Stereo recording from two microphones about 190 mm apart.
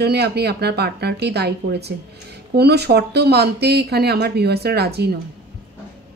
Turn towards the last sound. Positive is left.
turn(degrees=-60)  # may be behind; listen again after turning